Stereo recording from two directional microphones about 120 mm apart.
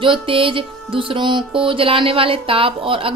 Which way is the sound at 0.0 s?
45° right (ahead or behind).